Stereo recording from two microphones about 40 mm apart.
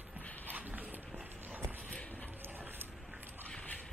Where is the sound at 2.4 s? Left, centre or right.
Right.